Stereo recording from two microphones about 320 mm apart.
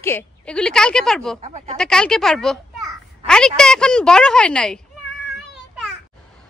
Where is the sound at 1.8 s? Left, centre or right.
Centre.